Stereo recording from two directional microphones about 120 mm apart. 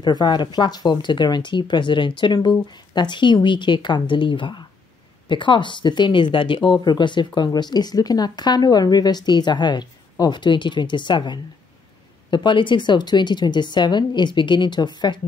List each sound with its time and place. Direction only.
0.0 s speech: 35° left (ahead or behind)